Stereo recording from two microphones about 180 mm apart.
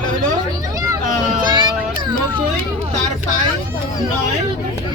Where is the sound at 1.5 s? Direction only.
25° right (ahead or behind).